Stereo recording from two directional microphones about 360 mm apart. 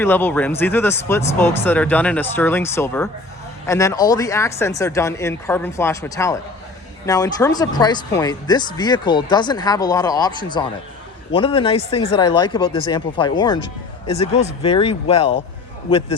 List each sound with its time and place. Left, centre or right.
0.0 s speech: centre